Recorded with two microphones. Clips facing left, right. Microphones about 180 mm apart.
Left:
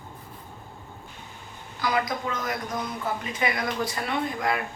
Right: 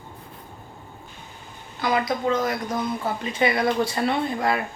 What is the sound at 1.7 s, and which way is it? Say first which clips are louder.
A woman's voice: right 3 dB; 25° right (ahead or behind).